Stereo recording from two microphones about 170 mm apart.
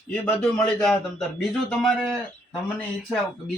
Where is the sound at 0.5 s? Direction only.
5° left (ahead or behind).